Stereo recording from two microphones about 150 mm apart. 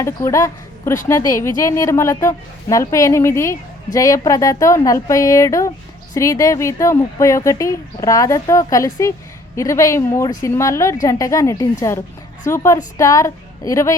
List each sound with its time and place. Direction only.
0.0 s a woman's voice: 20° left (ahead or behind)